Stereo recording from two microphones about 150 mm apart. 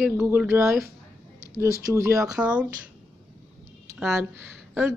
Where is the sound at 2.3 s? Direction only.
5° right (ahead or behind).